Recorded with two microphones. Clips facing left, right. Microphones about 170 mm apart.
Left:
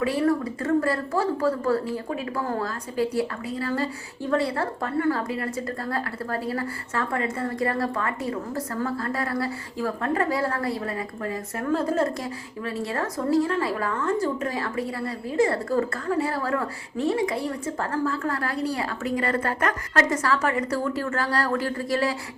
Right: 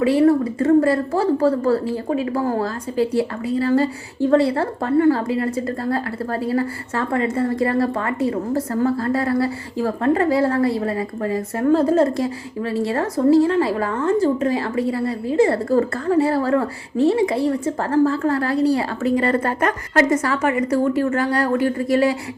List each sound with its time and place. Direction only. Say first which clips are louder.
0.0 s a woman's voice: right 8 dB; 25° right (ahead or behind)